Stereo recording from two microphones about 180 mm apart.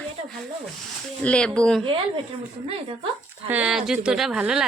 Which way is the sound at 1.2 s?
5° left (ahead or behind).